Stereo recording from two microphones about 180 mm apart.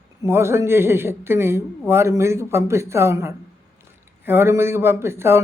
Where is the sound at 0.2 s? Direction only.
15° right (ahead or behind).